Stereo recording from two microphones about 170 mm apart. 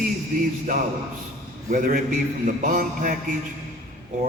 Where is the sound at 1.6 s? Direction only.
50° right (ahead or behind).